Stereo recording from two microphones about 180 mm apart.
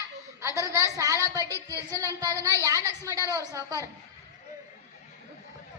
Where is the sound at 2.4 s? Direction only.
20° right (ahead or behind).